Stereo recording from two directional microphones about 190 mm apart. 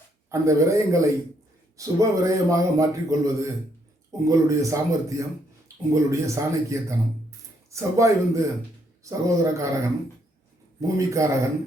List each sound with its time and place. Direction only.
0.3 s a man's voice: 15° right (ahead or behind)